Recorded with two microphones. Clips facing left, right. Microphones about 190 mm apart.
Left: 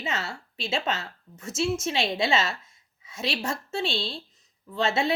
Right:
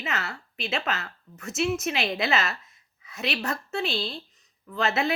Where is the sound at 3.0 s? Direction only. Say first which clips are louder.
Even; 30° left (ahead or behind).